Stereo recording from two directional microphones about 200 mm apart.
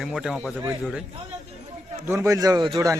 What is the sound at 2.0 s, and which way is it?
Speech, 15° right (ahead or behind).